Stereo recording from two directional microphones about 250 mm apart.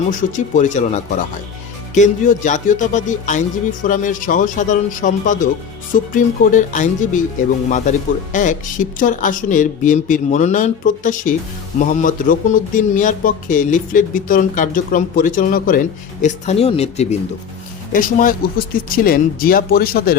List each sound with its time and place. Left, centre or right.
0.1 s speech: left